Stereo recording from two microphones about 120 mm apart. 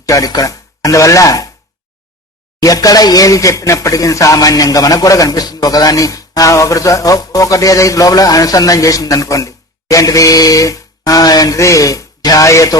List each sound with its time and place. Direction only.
0.0 s speech: 30° left (ahead or behind)
2.6 s speech: 30° left (ahead or behind)